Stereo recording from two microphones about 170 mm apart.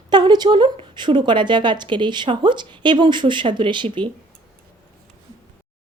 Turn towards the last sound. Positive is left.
turn(degrees=-30)  # may be behind; listen again after turning